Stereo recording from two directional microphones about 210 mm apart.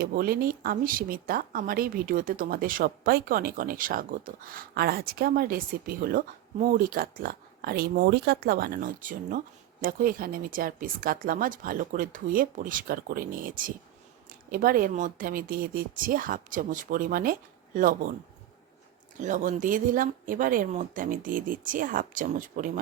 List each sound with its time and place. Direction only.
0.0 s speech: 45° right (ahead or behind)
19.2 s speech: 40° right (ahead or behind)